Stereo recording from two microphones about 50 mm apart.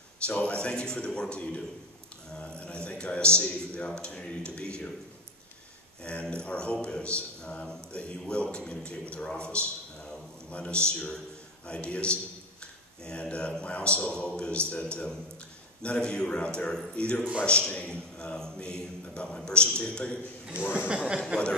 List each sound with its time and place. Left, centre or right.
0.3 s a man's voice: left
6.2 s a man's voice: centre
20.7 s speech: right